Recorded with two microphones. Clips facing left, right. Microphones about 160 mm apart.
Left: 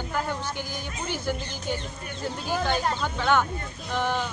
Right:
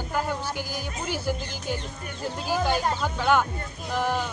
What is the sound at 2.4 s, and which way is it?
Speech, 5° right (ahead or behind).